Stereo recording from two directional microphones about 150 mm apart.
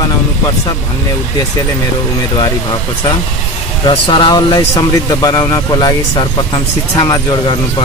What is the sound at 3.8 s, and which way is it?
Speech, 30° left (ahead or behind).